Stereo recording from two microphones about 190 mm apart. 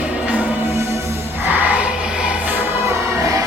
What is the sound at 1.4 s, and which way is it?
Music, 10° right (ahead or behind).